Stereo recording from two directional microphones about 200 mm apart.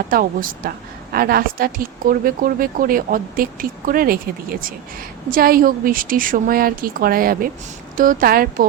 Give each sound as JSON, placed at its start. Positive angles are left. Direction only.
{"t": 0.1, "sound": "speech", "side_deg": -45}